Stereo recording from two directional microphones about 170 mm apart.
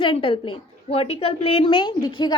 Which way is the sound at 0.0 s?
30° left (ahead or behind).